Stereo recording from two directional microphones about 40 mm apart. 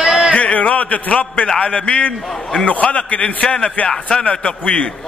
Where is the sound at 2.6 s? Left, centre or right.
Left.